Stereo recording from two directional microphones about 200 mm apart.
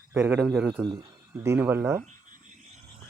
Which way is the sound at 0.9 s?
15° right (ahead or behind).